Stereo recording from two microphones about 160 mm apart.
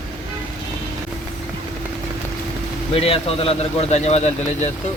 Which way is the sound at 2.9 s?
35° left (ahead or behind).